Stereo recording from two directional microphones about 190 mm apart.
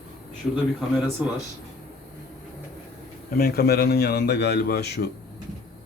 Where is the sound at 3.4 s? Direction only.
55° left (ahead or behind).